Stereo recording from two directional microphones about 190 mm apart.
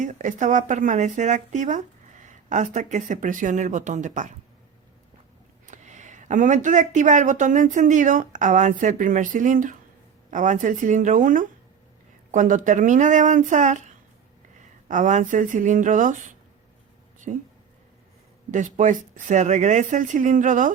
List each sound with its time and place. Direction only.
0.0 s speech: 40° right (ahead or behind)
5.6 s speech: 40° right (ahead or behind)
18.5 s speech: 40° right (ahead or behind)